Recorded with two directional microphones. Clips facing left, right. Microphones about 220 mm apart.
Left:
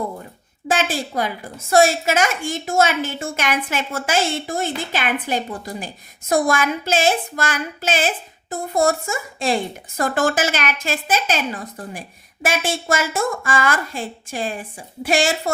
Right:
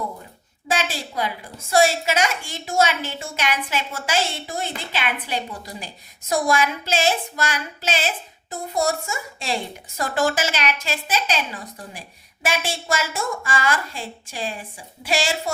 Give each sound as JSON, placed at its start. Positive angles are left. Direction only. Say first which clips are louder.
{"t": 0.7, "sound": "a woman's voice", "louder": "left 4 dB", "side_deg": 50}